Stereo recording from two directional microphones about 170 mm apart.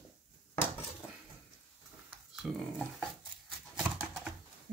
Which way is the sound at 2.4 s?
Centre (ahead or behind).